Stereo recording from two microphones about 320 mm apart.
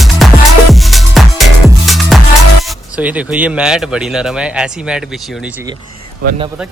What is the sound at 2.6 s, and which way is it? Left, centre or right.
Speech, centre.